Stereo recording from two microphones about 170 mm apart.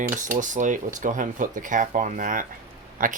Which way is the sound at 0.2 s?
50° right (ahead or behind).